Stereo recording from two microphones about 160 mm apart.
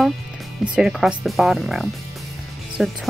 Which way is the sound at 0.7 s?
5° right (ahead or behind).